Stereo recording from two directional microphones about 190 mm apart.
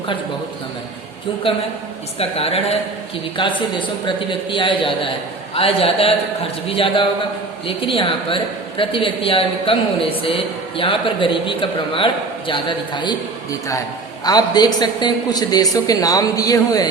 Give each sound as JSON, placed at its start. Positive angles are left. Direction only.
{"t": 2.1, "sound": "a woman's voice", "side_deg": 30}